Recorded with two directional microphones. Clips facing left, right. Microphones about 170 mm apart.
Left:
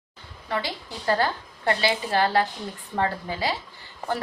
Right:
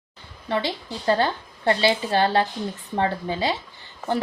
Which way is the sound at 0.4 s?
25° right (ahead or behind).